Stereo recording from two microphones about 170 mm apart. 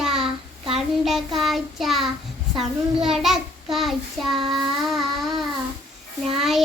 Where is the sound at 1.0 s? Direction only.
Centre (ahead or behind).